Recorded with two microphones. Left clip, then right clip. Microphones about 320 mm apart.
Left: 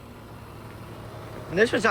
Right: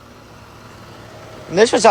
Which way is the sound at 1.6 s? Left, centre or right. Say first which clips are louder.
Right 10 dB; centre.